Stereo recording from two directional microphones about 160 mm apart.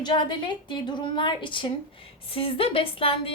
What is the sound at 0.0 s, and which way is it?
A woman's voice, 30° left (ahead or behind).